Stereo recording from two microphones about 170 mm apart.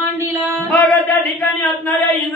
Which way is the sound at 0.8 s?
10° left (ahead or behind).